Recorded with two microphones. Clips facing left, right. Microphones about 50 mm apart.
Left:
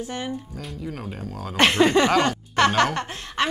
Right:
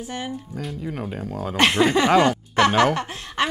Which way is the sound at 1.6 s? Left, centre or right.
Centre.